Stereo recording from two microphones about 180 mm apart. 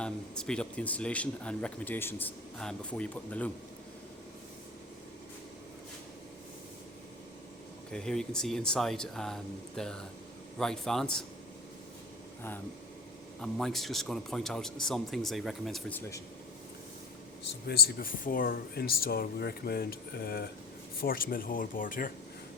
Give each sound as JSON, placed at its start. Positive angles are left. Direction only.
{"t": 0.0, "sound": "speech", "side_deg": 5}
{"t": 7.9, "sound": "speech", "side_deg": 5}
{"t": 13.4, "sound": "speech", "side_deg": 0}
{"t": 16.0, "sound": "speech", "side_deg": 15}
{"t": 17.4, "sound": "speech", "side_deg": 60}